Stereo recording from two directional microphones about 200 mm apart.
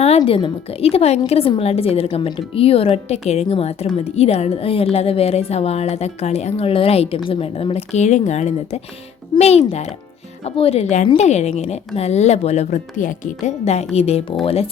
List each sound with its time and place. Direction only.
0.2 s a woman's voice: 25° left (ahead or behind)